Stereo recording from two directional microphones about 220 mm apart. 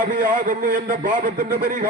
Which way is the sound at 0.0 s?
35° right (ahead or behind).